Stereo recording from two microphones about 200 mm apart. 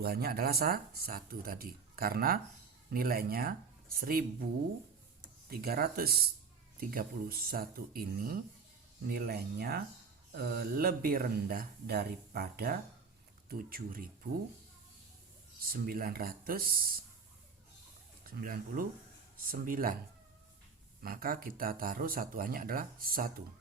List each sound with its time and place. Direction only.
0.0 s speech: 50° right (ahead or behind)
5.5 s speech: 50° right (ahead or behind)
15.6 s speech: 45° right (ahead or behind)
18.2 s speech: 45° right (ahead or behind)
21.0 s speech: 45° right (ahead or behind)